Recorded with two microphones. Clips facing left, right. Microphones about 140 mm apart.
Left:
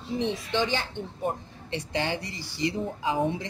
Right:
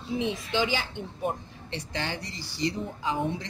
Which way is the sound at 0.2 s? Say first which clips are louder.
Left 1 dB; 10° right (ahead or behind).